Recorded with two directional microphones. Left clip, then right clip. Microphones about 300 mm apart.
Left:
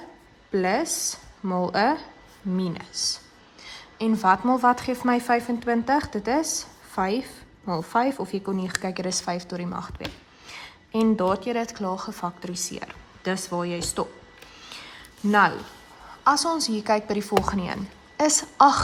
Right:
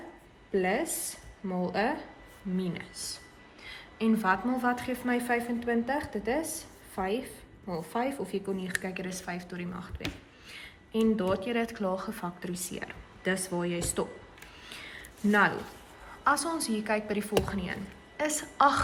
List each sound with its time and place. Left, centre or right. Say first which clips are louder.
0.5 s a woman's voice: left 5 dB; centre
14.7 s a sound: left 2 dB; centre
16.2 s a woman's voice: left 7 dB; centre